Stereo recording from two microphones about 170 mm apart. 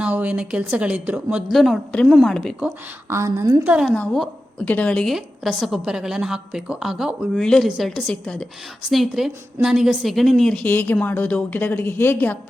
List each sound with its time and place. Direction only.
0.0 s a woman's voice: 10° right (ahead or behind)
3.1 s a woman's voice: 15° right (ahead or behind)
3.7 s a woman's voice: 5° right (ahead or behind)
3.9 s a woman's voice: 5° left (ahead or behind)